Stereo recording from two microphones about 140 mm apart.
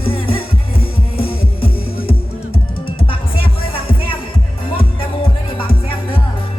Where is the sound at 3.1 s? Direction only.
40° left (ahead or behind).